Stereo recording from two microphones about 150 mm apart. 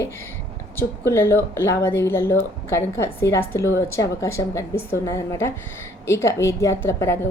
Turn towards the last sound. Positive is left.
turn(degrees=15)  # may be behind; listen again after turning